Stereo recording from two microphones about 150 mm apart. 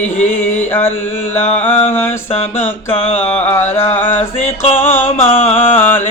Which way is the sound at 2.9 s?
40° left (ahead or behind).